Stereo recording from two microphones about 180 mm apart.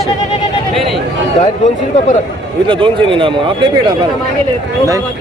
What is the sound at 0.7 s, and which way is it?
Speech, centre (ahead or behind).